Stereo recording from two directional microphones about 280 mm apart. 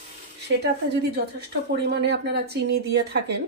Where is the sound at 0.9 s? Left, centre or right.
Right.